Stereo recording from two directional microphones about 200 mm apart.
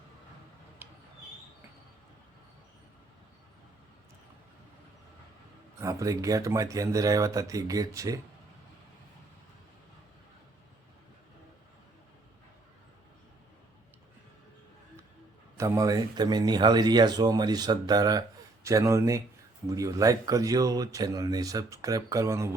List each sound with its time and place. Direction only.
0.8 s a sound: 10° right (ahead or behind)
5.8 s speech: 15° right (ahead or behind)
15.5 s speech: 15° right (ahead or behind)